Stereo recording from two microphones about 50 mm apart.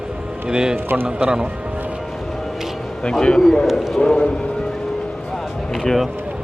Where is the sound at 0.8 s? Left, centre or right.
Right.